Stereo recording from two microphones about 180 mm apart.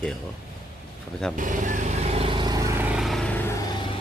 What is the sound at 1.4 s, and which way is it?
Vehicle, 45° right (ahead or behind).